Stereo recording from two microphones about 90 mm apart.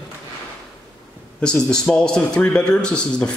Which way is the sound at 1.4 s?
10° left (ahead or behind).